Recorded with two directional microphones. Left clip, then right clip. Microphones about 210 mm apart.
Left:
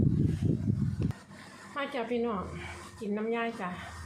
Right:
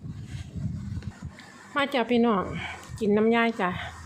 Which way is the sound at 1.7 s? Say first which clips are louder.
Right 8 dB; 55° right (ahead or behind).